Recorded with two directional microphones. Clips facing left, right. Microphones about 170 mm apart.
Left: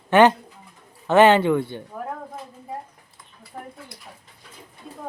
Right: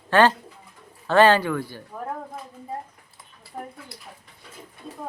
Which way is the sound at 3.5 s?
15° right (ahead or behind).